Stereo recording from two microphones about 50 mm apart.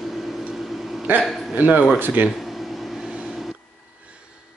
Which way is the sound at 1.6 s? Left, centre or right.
Right.